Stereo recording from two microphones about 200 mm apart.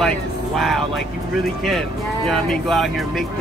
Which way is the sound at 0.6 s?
Centre (ahead or behind).